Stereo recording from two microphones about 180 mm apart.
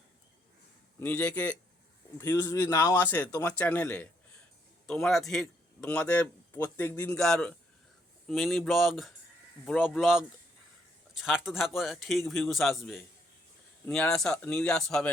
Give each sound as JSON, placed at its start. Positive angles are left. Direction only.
{"t": 0.9, "sound": "a man's voice", "side_deg": 10}
{"t": 13.9, "sound": "a man's voice", "side_deg": 0}